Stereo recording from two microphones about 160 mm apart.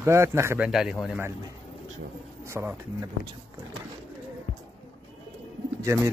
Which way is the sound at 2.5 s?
15° right (ahead or behind).